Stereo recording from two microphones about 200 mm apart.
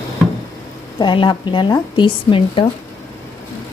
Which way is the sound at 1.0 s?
25° left (ahead or behind).